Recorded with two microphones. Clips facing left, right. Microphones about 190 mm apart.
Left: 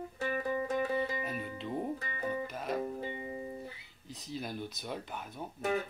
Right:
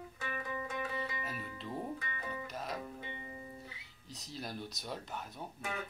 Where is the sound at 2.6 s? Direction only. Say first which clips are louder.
Left 9 dB; 55° left (ahead or behind).